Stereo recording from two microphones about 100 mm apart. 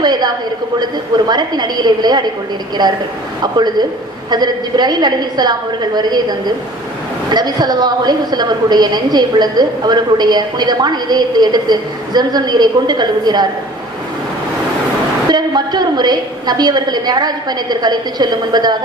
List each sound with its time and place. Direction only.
0.0 s a woman's voice: 45° right (ahead or behind)
15.3 s a woman's voice: 45° right (ahead or behind)